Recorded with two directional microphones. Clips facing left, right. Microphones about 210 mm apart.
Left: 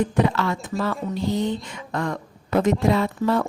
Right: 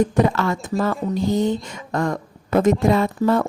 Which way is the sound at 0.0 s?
45° right (ahead or behind).